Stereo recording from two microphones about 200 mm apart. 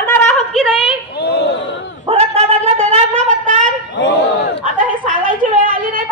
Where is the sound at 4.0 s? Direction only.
65° left (ahead or behind).